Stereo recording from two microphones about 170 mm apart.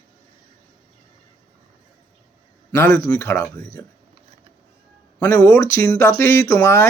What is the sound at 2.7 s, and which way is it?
Speech, 15° left (ahead or behind).